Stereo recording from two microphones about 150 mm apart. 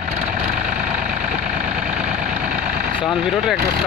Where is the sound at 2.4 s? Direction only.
75° right (ahead or behind).